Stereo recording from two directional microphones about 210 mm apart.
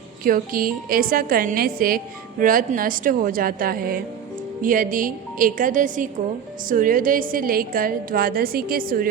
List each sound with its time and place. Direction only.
0.3 s a woman's voice: 40° right (ahead or behind)